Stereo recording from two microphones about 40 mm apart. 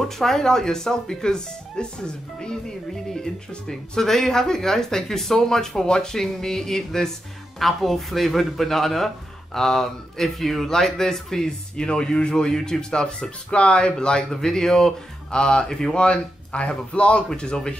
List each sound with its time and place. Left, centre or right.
0.2 s speech: centre; by 17.2 s left
17.3 s speech: centre